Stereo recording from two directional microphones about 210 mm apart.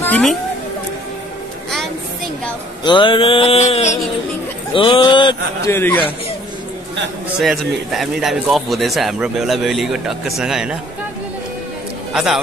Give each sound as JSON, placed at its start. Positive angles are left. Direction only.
{"t": 0.0, "sound": "a woman's voice", "side_deg": 5}
{"t": 2.8, "sound": "a man's voice", "side_deg": 20}
{"t": 7.3, "sound": "speech", "side_deg": 0}
{"t": 12.1, "sound": "a man's voice", "side_deg": 0}